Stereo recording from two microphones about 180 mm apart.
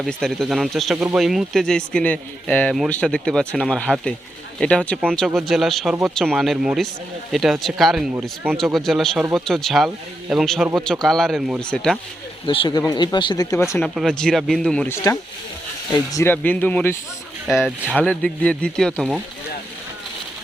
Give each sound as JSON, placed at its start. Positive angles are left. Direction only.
{"t": 0.0, "sound": "speech", "side_deg": 0}
{"t": 5.1, "sound": "speech", "side_deg": 0}
{"t": 12.5, "sound": "speech", "side_deg": 25}
{"t": 13.7, "sound": "speech", "side_deg": 0}
{"t": 15.9, "sound": "speech", "side_deg": 20}